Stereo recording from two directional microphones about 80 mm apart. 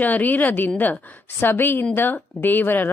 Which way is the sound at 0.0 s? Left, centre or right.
Left.